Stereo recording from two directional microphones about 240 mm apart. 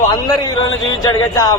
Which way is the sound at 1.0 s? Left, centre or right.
Centre.